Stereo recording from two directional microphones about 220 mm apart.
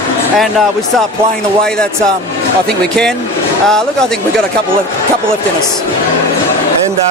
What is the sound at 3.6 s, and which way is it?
Speech, 5° left (ahead or behind).